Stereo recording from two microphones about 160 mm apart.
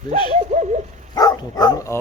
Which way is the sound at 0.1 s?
45° right (ahead or behind).